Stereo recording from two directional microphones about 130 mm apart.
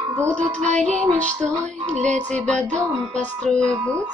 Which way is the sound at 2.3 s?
10° left (ahead or behind).